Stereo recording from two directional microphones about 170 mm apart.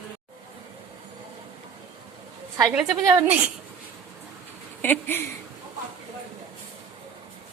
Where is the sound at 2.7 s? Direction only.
20° right (ahead or behind).